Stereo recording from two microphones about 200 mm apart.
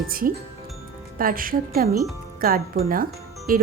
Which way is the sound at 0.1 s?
45° right (ahead or behind).